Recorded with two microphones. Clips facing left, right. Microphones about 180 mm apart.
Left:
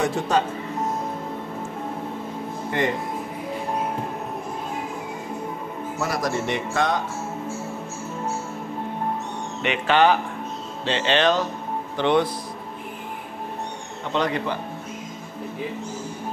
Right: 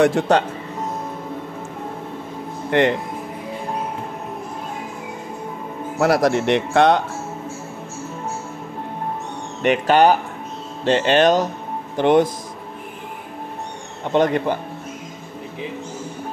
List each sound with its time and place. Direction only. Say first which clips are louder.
0.0 s speech: right 7 dB; 70° right (ahead or behind)
2.7 s speech: right 8 dB; 70° right (ahead or behind)
5.9 s speech: right 9 dB; 65° right (ahead or behind)
9.6 s speech: right 5 dB; 45° right (ahead or behind)
14.1 s speech: right 7 dB; 50° right (ahead or behind)